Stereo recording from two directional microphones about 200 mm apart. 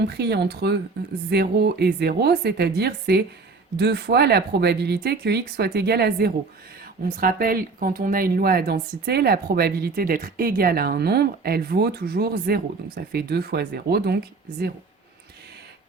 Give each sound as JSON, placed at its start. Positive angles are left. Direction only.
{"t": 0.0, "sound": "speech", "side_deg": -55}